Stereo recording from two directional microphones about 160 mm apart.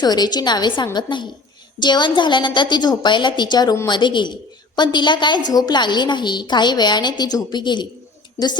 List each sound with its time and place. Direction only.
0.0 s a woman's voice: 25° left (ahead or behind)